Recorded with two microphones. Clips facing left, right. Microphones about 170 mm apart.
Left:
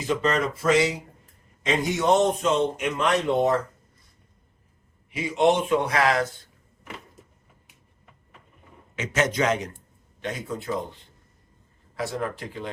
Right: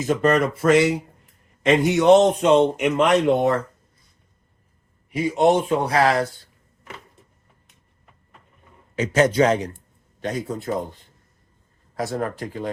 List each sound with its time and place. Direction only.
0.0 s speech: 50° right (ahead or behind); by 3.5 s 70° right (ahead or behind)
5.1 s a man's voice: 40° right (ahead or behind)
9.0 s a man's voice: 35° right (ahead or behind)
11.9 s speech: 45° right (ahead or behind)